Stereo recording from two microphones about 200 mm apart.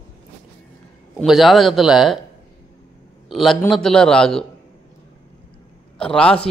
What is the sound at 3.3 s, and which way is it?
A man's voice, centre (ahead or behind).